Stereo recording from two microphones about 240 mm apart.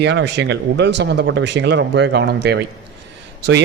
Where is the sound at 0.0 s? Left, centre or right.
Right.